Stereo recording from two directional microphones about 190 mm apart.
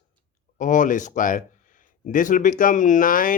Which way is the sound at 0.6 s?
45° left (ahead or behind).